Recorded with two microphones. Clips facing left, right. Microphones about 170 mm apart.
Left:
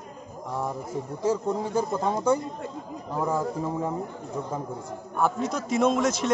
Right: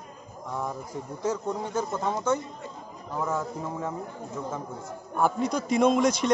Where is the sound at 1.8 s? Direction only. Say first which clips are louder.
Left 2 dB; 30° left (ahead or behind).